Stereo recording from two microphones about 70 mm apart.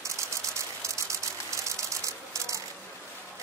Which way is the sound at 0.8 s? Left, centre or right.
Right.